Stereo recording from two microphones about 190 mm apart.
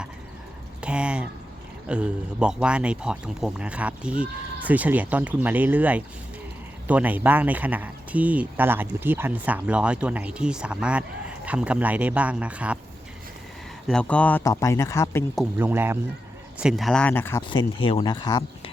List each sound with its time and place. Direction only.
0.8 s a sound: 5° right (ahead or behind)
1.9 s speech: 5° right (ahead or behind)
13.8 s speech: 5° left (ahead or behind)
15.5 s speech: 10° right (ahead or behind); by 17.4 s 10° left (ahead or behind)
17.5 s speech: 25° left (ahead or behind)